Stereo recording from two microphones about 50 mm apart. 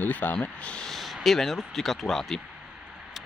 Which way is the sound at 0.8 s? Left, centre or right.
Centre.